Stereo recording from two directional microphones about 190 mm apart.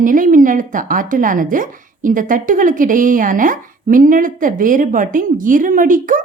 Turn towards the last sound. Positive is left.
turn(degrees=-45)  # may be behind; listen again after turning